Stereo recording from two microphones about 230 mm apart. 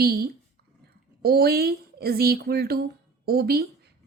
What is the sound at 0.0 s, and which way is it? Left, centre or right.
A woman's voice, right.